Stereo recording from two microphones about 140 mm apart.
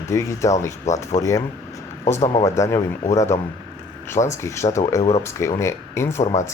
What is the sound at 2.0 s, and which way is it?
Speech, 55° left (ahead or behind).